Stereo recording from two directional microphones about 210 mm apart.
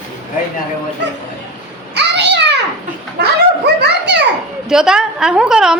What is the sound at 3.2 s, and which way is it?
Dog, 50° right (ahead or behind).